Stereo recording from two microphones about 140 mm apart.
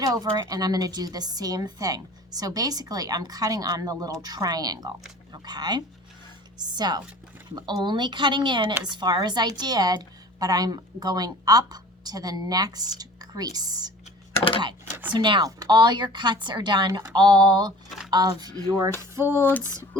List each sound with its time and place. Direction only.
0.0 s a woman's voice: 25° right (ahead or behind)
15.1 s a woman's voice: 35° right (ahead or behind)
17.8 s a sound: centre (ahead or behind)
18.1 s a woman's voice: 30° right (ahead or behind)
19.5 s female singing: 10° left (ahead or behind)